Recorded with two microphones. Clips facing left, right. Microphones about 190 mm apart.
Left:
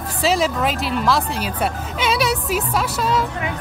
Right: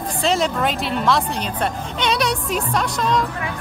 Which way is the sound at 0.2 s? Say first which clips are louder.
Left 1 dB; 5° left (ahead or behind).